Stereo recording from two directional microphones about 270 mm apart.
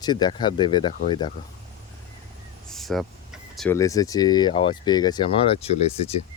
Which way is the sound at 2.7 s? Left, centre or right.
Centre.